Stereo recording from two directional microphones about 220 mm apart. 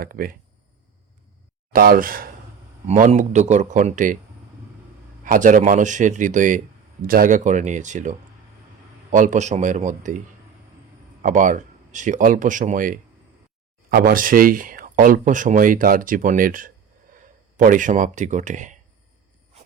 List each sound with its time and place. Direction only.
0.0 s speech: 40° right (ahead or behind)
1.7 s speech: 40° right (ahead or behind)
5.2 s speech: 35° right (ahead or behind)
9.1 s speech: 35° right (ahead or behind)
11.2 s speech: 35° right (ahead or behind)